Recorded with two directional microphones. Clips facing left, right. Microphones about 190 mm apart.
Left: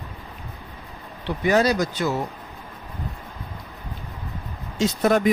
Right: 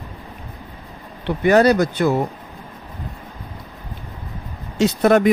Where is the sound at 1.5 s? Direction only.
60° right (ahead or behind).